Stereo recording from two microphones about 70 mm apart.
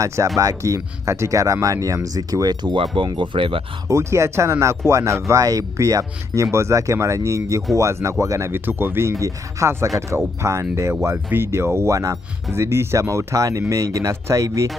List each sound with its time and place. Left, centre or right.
0.0 s speech: right
2.1 s speech: right
3.9 s speech: right
5.3 s speech: right
8.5 s speech: right